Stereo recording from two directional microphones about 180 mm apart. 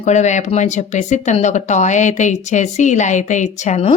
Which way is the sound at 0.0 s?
40° left (ahead or behind).